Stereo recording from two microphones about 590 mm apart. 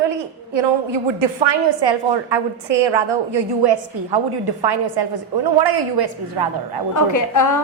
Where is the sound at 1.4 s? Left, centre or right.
Right.